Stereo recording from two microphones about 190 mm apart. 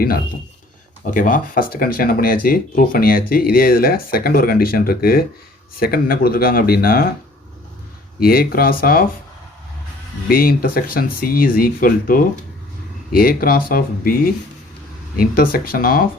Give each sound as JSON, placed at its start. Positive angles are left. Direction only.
{"t": 1.1, "sound": "speech", "side_deg": 45}
{"t": 8.2, "sound": "speech", "side_deg": 50}
{"t": 10.2, "sound": "speech", "side_deg": 50}